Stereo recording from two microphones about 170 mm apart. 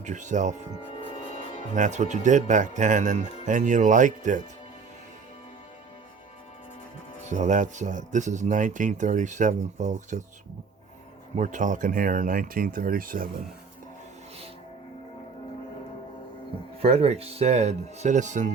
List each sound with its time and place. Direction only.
0.0 s speech: 45° right (ahead or behind)
1.7 s speech: 45° right (ahead or behind)
7.3 s speech: 45° right (ahead or behind)
11.3 s speech: 45° right (ahead or behind)
16.8 s speech: 35° right (ahead or behind)